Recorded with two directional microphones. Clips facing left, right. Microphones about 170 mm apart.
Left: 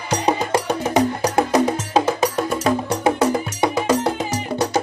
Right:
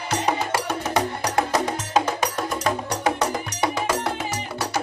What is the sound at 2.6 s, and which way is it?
Wood block, 25° left (ahead or behind).